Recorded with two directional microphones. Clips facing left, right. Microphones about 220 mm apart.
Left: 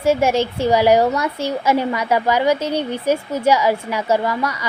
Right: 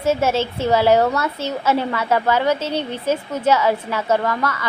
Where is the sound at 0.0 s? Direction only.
15° left (ahead or behind).